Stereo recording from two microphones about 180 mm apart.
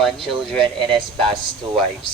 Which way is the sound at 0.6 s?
25° right (ahead or behind).